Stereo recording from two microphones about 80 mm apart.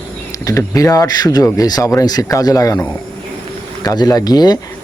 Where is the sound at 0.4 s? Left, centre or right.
Left.